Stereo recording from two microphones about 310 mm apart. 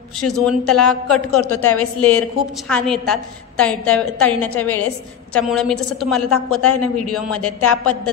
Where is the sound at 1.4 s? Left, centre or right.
Left.